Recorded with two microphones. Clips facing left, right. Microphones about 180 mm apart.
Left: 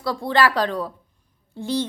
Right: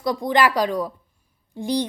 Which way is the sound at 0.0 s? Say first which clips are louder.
Right 1 dB; 15° right (ahead or behind).